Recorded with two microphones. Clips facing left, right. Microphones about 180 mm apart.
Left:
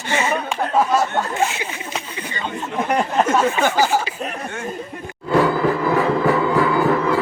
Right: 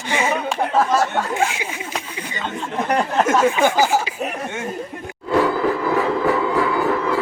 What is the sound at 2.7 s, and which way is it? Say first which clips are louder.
Speech: even; 10° left (ahead or behind).